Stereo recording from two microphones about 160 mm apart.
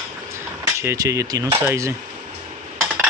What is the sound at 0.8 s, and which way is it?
Speech, 15° right (ahead or behind).